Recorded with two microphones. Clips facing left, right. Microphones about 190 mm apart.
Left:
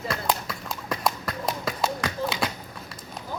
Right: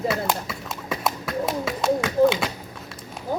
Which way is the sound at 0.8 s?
5° right (ahead or behind).